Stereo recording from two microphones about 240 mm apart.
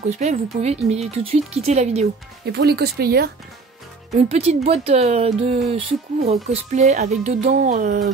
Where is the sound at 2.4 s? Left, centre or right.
Right.